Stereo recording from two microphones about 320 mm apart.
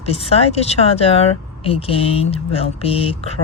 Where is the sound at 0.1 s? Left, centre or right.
Centre.